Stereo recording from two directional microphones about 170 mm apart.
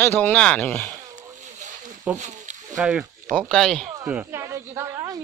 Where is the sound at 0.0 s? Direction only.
10° left (ahead or behind).